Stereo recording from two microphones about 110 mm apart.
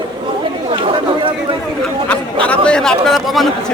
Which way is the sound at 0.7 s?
55° right (ahead or behind).